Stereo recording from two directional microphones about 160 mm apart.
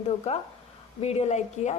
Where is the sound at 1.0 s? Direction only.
45° left (ahead or behind).